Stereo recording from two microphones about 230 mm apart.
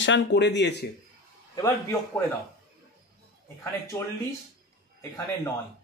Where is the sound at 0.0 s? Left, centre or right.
Left.